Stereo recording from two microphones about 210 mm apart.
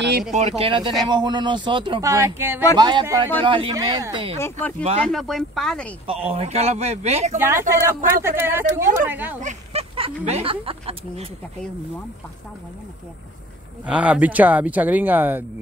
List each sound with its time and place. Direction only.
0.3 s speech: 30° right (ahead or behind)
4.4 s speech: 10° left (ahead or behind)
6.0 s speech: 30° right (ahead or behind)
7.3 s speech: 10° right (ahead or behind)
9.4 s a sound: 30° right (ahead or behind)
10.2 s speech: 30° right (ahead or behind)
13.8 s speech: 5° right (ahead or behind)